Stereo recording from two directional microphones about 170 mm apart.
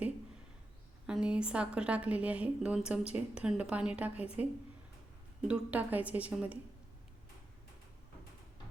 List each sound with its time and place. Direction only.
1.0 s a woman's voice: 5° right (ahead or behind)
5.5 s a woman's voice: 10° right (ahead or behind)